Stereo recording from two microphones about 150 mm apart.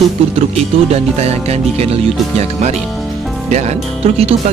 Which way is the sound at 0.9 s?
45° right (ahead or behind).